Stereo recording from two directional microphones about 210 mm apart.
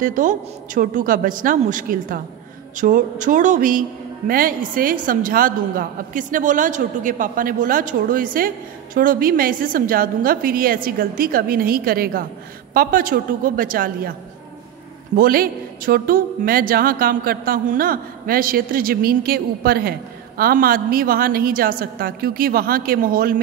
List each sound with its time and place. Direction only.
0.0 s a man's voice: 40° right (ahead or behind)
15.1 s speech: 45° right (ahead or behind)